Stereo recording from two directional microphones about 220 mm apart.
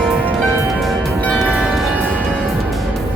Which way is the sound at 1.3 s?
5° left (ahead or behind).